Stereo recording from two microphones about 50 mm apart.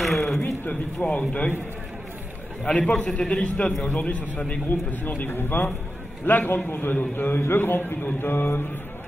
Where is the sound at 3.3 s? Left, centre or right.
Left.